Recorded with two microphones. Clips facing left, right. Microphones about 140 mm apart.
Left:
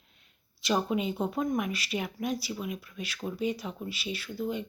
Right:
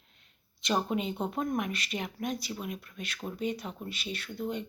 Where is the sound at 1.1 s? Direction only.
Centre (ahead or behind).